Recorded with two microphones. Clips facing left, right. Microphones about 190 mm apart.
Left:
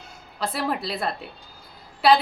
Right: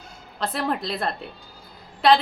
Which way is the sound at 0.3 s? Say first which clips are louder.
Right 1 dB; 5° left (ahead or behind).